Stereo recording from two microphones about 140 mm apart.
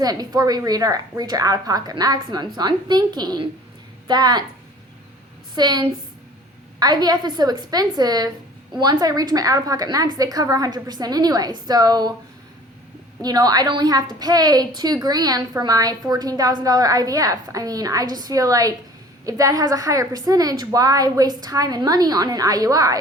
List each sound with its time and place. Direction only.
0.0 s a woman's voice: 25° right (ahead or behind)
5.5 s a woman's voice: 30° right (ahead or behind)
13.2 s a woman's voice: 30° right (ahead or behind)